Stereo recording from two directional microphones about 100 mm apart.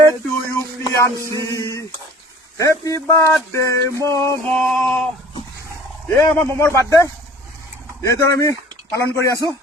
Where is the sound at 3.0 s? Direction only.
25° left (ahead or behind).